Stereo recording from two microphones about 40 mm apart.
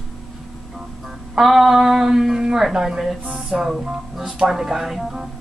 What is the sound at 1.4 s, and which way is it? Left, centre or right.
Speech, centre.